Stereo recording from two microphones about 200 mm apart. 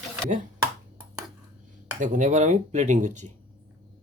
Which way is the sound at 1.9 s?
40° right (ahead or behind).